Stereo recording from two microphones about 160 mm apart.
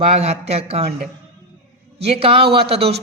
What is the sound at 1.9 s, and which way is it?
Speech, 40° right (ahead or behind).